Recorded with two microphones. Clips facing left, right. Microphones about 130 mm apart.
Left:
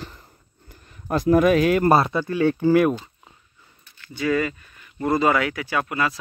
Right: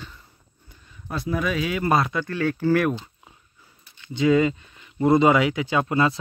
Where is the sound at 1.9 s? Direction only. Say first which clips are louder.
Left 4 dB; 30° left (ahead or behind).